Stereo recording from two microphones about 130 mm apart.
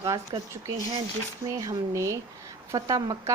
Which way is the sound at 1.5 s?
25° right (ahead or behind).